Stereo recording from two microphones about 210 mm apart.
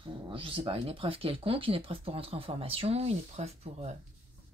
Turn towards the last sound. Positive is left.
turn(degrees=-30)  # may be behind; listen again after turning